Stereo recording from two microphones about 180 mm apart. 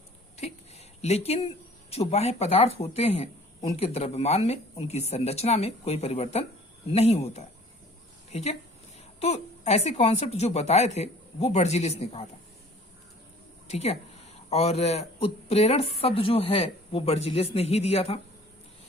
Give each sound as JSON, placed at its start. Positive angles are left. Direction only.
{"t": 1.0, "sound": "speech", "side_deg": 35}
{"t": 13.7, "sound": "speech", "side_deg": 35}